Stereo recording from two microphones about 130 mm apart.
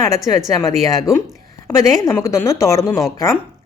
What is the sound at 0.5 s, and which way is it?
A woman's voice, 25° left (ahead or behind).